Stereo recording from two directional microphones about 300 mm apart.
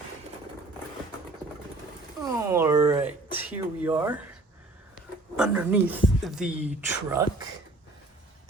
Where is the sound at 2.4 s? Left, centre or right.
Centre.